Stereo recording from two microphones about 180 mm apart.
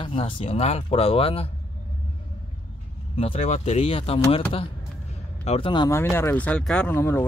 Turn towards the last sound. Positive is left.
turn(degrees=15)  # may be behind; listen again after turning